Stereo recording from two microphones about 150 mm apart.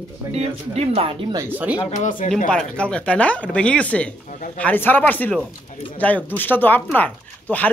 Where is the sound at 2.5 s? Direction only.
5° left (ahead or behind).